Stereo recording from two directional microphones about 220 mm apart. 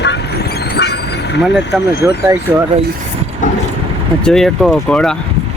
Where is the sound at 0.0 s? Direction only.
50° left (ahead or behind).